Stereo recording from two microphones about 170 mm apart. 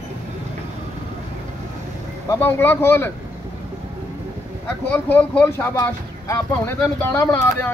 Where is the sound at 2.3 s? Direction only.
15° left (ahead or behind).